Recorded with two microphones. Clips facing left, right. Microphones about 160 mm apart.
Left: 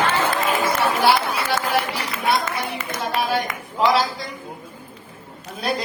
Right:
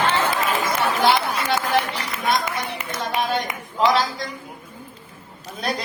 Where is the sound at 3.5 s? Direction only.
20° right (ahead or behind).